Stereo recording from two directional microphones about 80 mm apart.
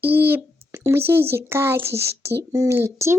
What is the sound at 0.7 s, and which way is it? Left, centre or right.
A child's voice, right.